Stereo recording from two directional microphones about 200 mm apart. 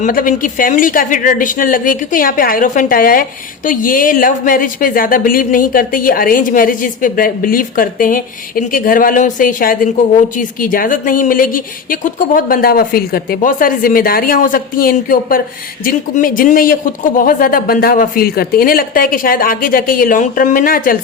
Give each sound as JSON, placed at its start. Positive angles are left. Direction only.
{"t": 0.0, "sound": "a woman's voice", "side_deg": 45}